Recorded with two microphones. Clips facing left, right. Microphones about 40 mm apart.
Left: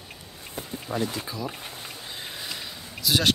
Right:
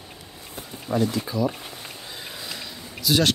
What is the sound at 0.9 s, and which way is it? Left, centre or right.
Speech, centre.